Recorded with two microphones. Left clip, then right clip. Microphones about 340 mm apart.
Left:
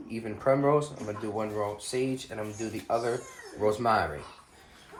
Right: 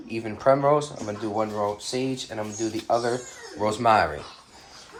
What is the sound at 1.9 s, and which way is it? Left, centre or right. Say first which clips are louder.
Speech: right 3 dB; right.